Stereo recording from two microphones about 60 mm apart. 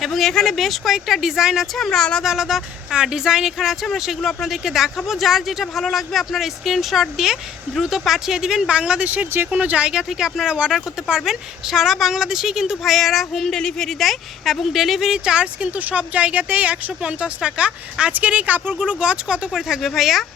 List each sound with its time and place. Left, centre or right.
0.0 s speech: centre
1.8 s speech: centre
2.2 s speech: centre
9.3 s speech: right
18.8 s speech: centre